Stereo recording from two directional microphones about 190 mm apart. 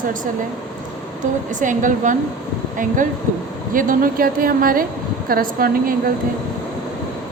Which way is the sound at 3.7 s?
45° right (ahead or behind).